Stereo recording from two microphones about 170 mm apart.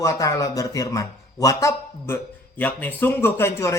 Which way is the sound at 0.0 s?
20° left (ahead or behind).